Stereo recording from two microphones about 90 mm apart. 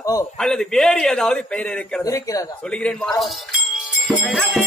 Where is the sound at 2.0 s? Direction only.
40° left (ahead or behind).